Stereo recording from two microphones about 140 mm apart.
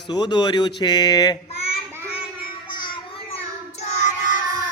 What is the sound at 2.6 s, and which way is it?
Child singing, 35° left (ahead or behind).